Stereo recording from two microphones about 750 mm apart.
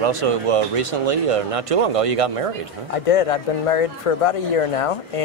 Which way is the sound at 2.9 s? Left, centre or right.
Left.